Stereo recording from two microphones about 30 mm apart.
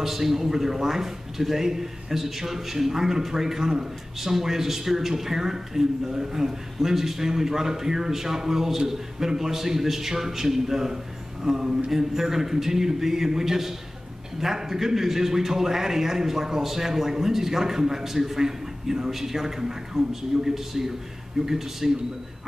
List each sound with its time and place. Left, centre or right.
0.0 s a man's voice: centre